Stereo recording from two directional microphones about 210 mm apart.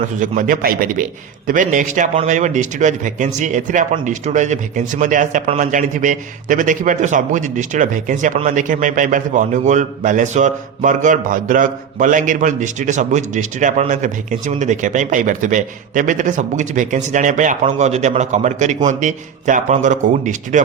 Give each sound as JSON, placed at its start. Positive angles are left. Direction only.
{"t": 0.0, "sound": "a man's voice", "side_deg": -40}